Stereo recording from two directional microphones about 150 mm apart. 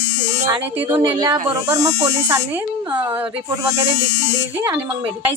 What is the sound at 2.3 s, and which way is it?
Speech, 10° right (ahead or behind).